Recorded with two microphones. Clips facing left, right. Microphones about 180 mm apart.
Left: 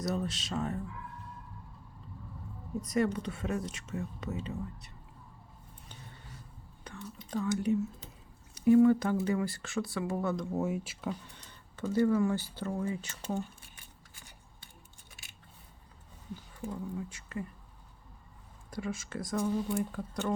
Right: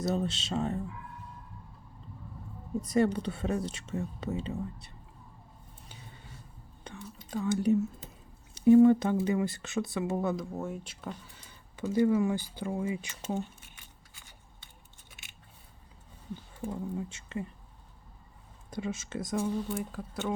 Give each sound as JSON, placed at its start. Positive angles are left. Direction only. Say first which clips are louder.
{"t": 0.0, "sound": "speech", "louder": "right 3 dB", "side_deg": -25}
{"t": 2.8, "sound": "speech", "louder": "right 3 dB", "side_deg": -30}
{"t": 6.9, "sound": "whispering", "louder": "right 1 dB", "side_deg": -25}
{"t": 7.2, "sound": "whispering", "louder": "left 1 dB", "side_deg": -5}
{"t": 7.4, "sound": "speech", "louder": "right 4 dB", "side_deg": -35}
{"t": 10.5, "sound": "speech", "louder": "left 4 dB", "side_deg": 5}
{"t": 11.3, "sound": "speech", "louder": "right 1 dB", "side_deg": -10}
{"t": 16.6, "sound": "speech", "louder": "right 2 dB", "side_deg": -25}
{"t": 18.7, "sound": "speech", "louder": "right 2 dB", "side_deg": -20}
{"t": 19.7, "sound": "speech", "louder": "left 2 dB", "side_deg": 0}